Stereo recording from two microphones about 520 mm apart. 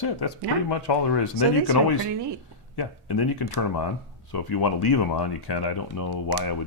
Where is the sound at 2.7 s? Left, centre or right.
Left.